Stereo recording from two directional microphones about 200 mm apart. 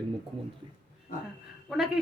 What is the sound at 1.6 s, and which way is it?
Speech, centre (ahead or behind).